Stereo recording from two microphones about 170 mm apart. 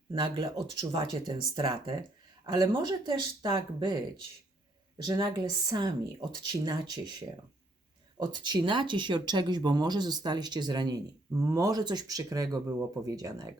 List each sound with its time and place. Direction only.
0.1 s speech: 30° right (ahead or behind)
5.0 s speech: 25° right (ahead or behind)
8.2 s speech: 25° right (ahead or behind)